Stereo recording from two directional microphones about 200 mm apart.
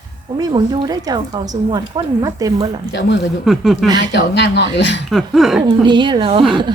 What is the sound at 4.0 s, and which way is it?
Speech, 60° left (ahead or behind).